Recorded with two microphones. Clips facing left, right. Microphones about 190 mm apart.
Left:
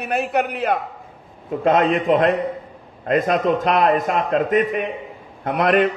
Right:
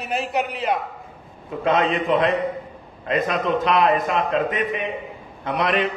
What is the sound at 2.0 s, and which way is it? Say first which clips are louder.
A man's voice: left 3 dB; 45° left (ahead or behind).